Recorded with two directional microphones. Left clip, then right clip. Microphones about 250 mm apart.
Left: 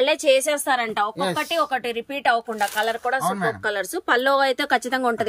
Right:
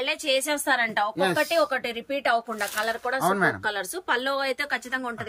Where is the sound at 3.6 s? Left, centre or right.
Centre.